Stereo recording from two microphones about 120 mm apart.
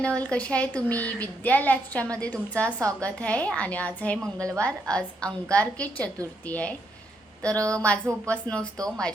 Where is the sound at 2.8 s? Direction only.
25° right (ahead or behind).